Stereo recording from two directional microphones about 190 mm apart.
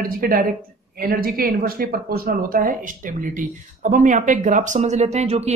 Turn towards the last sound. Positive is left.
turn(degrees=-35)  # may be behind; listen again after turning